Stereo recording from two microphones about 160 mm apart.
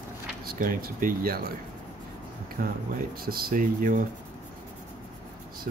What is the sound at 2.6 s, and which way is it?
Speech, 65° right (ahead or behind).